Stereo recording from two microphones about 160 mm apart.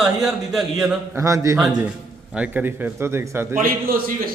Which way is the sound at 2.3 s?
10° right (ahead or behind).